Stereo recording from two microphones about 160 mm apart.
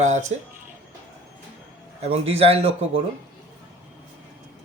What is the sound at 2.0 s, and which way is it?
Speech, 40° right (ahead or behind).